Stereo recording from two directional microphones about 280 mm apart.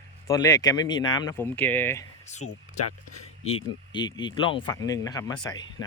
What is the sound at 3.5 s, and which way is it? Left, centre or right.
Speech, centre.